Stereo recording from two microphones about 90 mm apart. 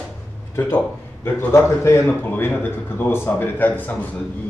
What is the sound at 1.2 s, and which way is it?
A man's voice, 30° left (ahead or behind).